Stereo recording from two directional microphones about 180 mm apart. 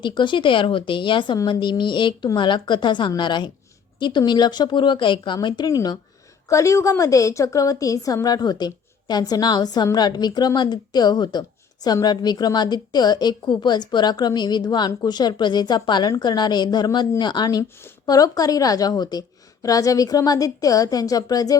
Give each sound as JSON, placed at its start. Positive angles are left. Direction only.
{"t": 0.0, "sound": "a woman's voice", "side_deg": 25}